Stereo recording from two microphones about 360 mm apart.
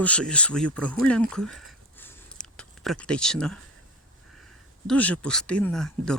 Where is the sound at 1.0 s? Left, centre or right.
Centre.